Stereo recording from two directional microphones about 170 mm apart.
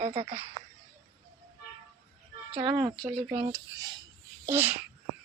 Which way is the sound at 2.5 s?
30° right (ahead or behind).